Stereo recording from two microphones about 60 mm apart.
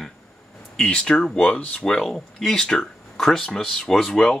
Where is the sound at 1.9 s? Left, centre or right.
Centre.